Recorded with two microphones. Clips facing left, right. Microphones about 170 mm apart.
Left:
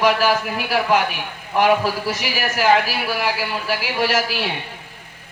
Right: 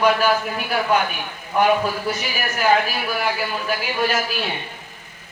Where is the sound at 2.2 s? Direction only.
90° left.